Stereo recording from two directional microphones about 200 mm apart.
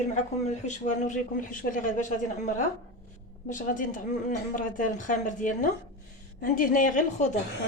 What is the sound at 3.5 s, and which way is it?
A woman's voice, 40° left (ahead or behind).